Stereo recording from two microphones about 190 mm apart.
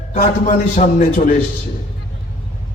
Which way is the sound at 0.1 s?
45° left (ahead or behind).